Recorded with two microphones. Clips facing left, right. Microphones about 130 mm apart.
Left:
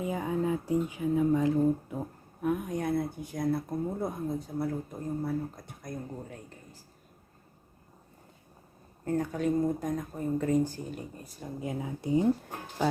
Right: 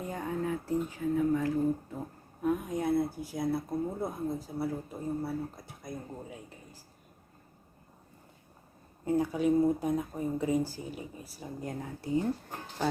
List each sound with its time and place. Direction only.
0.0 s speech: 5° left (ahead or behind)
0.4 s speech: 15° left (ahead or behind)
2.4 s speech: centre (ahead or behind)
9.0 s speech: 10° right (ahead or behind)
11.9 s speech: 20° left (ahead or behind)